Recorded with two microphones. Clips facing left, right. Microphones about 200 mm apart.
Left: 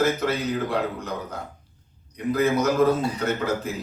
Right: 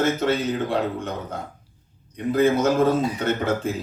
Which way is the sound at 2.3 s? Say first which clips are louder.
Right 2 dB; 30° right (ahead or behind).